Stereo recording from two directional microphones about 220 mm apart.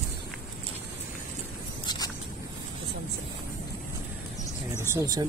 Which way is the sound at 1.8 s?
20° left (ahead or behind).